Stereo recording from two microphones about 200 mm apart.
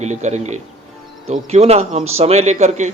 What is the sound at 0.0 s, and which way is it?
Speech, 35° right (ahead or behind).